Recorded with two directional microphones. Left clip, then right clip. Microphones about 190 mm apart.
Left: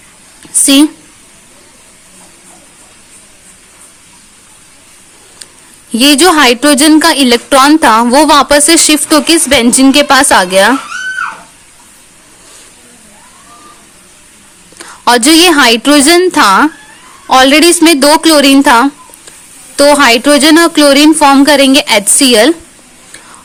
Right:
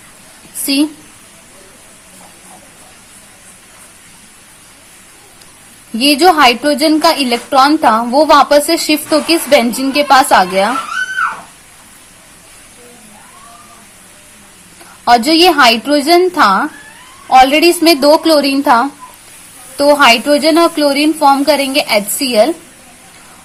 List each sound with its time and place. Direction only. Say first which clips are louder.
6.0 s a woman's voice: left 2 dB; 45° left (ahead or behind)
15.0 s a woman's voice: left 3 dB; 50° left (ahead or behind)